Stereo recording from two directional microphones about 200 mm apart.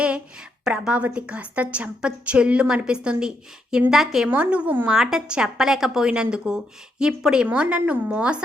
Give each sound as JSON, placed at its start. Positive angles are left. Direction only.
{"t": 0.6, "sound": "a woman's voice", "side_deg": -5}